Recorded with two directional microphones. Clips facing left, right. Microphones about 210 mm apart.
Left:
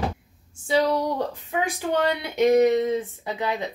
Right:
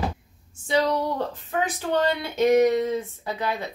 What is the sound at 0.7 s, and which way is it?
Speech, 10° left (ahead or behind).